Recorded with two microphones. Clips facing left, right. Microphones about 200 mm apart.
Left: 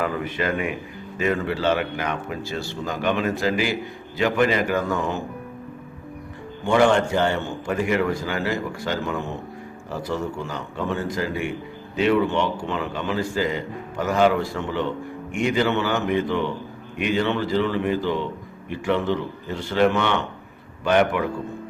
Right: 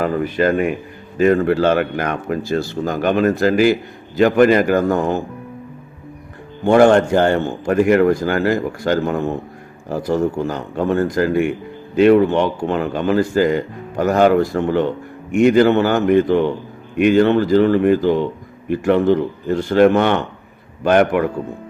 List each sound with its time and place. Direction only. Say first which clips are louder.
0.0 s a man's voice: right 8 dB; 40° right (ahead or behind)
6.7 s a man's voice: right 7 dB; 45° right (ahead or behind)